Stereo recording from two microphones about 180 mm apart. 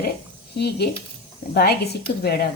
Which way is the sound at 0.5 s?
65° left (ahead or behind).